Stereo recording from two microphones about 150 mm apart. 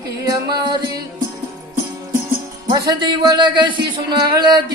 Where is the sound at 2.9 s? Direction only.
30° right (ahead or behind).